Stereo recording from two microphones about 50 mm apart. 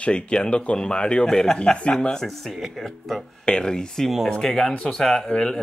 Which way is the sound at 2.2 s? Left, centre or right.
Centre.